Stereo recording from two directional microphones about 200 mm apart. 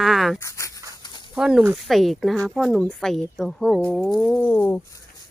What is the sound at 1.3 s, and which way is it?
Speech, 5° right (ahead or behind).